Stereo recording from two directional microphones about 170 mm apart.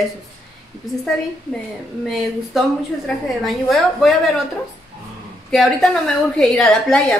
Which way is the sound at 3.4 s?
Centre (ahead or behind).